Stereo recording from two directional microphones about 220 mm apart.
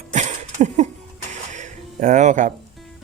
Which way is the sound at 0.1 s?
30° right (ahead or behind).